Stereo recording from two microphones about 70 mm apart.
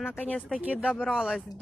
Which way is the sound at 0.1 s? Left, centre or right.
Left.